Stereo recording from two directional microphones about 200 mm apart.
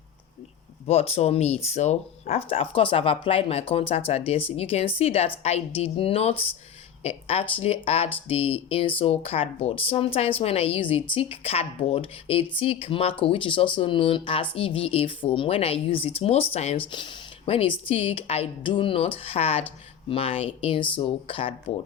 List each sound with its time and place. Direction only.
0.9 s a woman's voice: 30° left (ahead or behind)